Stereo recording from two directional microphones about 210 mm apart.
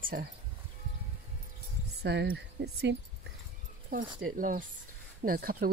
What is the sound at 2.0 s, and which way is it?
Speech, 50° right (ahead or behind).